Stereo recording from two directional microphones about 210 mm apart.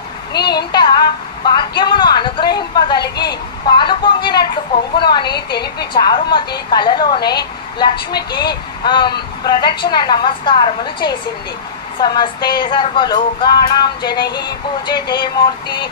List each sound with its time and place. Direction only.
0.3 s a sound: 50° left (ahead or behind)
0.6 s a woman's voice: 20° left (ahead or behind)
5.3 s a woman's voice: 50° left (ahead or behind)
5.9 s speech: 20° left (ahead or behind)